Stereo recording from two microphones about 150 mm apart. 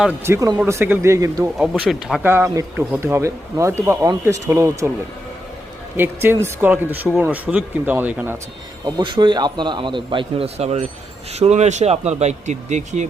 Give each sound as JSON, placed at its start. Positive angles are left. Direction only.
{"t": 0.3, "sound": "a man's voice", "side_deg": -25}
{"t": 1.5, "sound": "speech", "side_deg": -5}
{"t": 2.2, "sound": "a man's voice", "side_deg": -15}
{"t": 6.0, "sound": "a man's voice", "side_deg": -15}
{"t": 8.8, "sound": "a man's voice", "side_deg": -30}